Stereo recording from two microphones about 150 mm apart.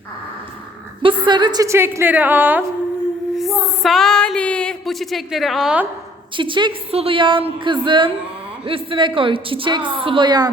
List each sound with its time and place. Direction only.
1.0 s a woman's voice: 30° right (ahead or behind); by 2.6 s 10° right (ahead or behind)
3.3 s a sound: centre (ahead or behind)
6.3 s a woman's voice: 35° right (ahead or behind)